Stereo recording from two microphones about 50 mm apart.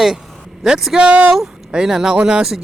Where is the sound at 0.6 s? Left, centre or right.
Centre.